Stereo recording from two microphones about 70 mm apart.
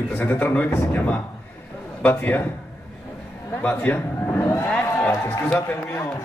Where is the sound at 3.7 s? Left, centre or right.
Left.